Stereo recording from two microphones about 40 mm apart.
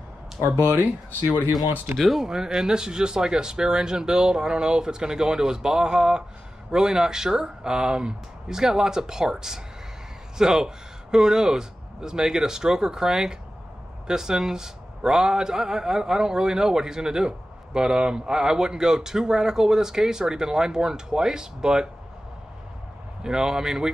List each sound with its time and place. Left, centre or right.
1.4 s speech: right
2.0 s speech: centre
2.2 s speech: centre
23.2 s speech: centre